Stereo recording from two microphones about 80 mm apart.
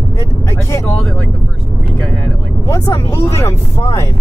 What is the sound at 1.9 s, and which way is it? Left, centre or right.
Vehicle, centre.